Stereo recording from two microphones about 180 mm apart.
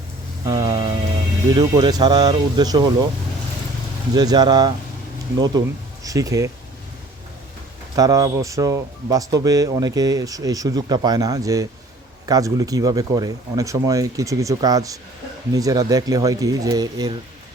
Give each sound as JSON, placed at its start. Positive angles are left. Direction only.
{"t": 0.4, "sound": "speech", "side_deg": -20}
{"t": 4.1, "sound": "speech", "side_deg": -20}
{"t": 7.9, "sound": "speech", "side_deg": -20}